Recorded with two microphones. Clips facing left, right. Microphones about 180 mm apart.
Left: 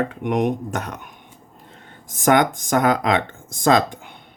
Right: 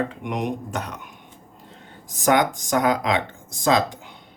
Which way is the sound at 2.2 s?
55° left (ahead or behind).